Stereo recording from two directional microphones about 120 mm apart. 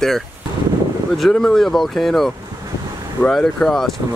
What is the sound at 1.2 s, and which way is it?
Speech, 5° left (ahead or behind).